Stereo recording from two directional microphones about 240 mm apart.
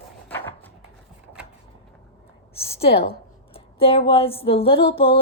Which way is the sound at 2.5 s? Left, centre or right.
Left.